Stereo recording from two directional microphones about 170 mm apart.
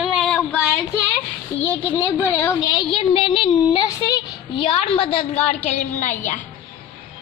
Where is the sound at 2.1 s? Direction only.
15° left (ahead or behind).